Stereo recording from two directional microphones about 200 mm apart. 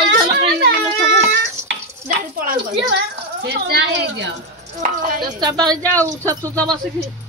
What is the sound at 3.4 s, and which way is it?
Speech, 55° right (ahead or behind).